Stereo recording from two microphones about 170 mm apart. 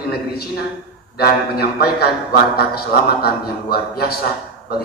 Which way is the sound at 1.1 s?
65° left (ahead or behind).